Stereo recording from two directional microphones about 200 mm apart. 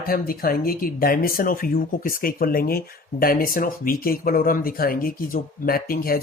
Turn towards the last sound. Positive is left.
turn(degrees=45)  # may be behind; listen again after turning